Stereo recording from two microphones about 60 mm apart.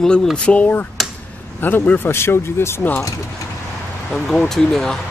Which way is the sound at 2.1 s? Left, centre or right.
Left.